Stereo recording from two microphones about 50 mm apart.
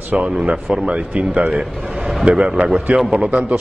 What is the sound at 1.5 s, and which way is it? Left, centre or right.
Speech, centre.